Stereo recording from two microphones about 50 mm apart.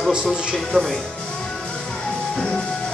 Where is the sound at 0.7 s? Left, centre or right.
Centre.